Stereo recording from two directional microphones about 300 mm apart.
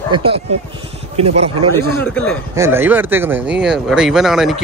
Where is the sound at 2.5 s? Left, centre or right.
Centre.